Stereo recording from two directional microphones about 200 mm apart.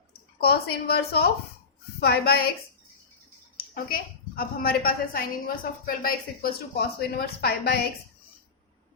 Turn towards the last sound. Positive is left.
turn(degrees=50)  # may be behind; listen again after turning